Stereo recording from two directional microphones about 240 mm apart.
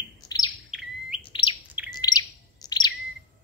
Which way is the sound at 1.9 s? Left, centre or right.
Centre.